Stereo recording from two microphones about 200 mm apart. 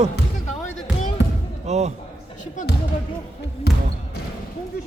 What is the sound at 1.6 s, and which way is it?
Speech, 35° right (ahead or behind).